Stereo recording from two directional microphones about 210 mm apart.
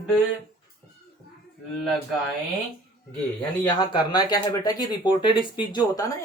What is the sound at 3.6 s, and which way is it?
Speech, 20° left (ahead or behind).